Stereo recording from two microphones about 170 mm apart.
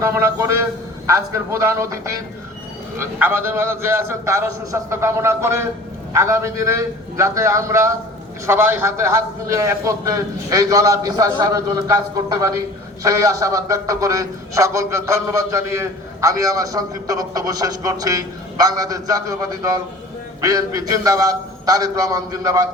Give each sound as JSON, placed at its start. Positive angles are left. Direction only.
{"t": 0.0, "sound": "a man's voice", "side_deg": -15}